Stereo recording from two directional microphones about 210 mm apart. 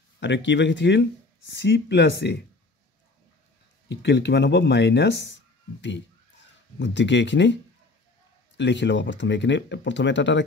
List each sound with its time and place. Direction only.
0.2 s speech: 60° left (ahead or behind)
3.9 s speech: 55° left (ahead or behind)
8.5 s speech: 55° left (ahead or behind)